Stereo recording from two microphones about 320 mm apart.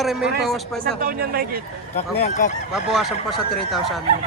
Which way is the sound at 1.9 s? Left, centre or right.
Left.